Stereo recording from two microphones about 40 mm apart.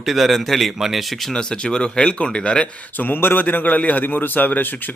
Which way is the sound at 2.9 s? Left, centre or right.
Left.